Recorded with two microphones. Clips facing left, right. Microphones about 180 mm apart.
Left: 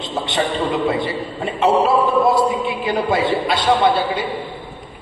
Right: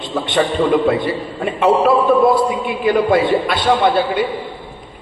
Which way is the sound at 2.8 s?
50° right (ahead or behind).